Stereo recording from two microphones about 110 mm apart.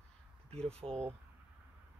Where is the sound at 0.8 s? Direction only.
40° right (ahead or behind).